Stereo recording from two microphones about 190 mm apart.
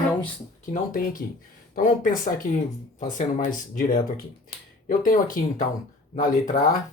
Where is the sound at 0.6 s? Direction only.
45° left (ahead or behind).